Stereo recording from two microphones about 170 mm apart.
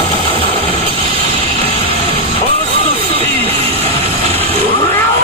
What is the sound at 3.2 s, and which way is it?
Music, 35° right (ahead or behind).